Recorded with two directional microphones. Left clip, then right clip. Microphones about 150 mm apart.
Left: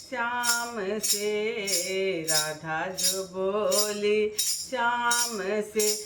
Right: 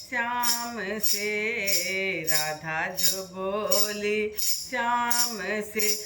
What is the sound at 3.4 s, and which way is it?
Music, 10° left (ahead or behind).